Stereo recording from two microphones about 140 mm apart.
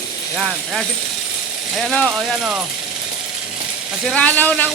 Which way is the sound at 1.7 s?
5° left (ahead or behind).